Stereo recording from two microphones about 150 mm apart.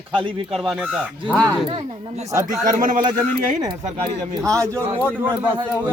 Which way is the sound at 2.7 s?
60° right (ahead or behind).